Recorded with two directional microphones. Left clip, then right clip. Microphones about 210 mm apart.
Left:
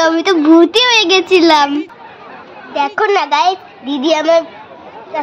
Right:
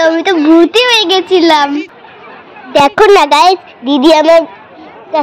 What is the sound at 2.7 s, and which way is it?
A woman's voice, 35° right (ahead or behind).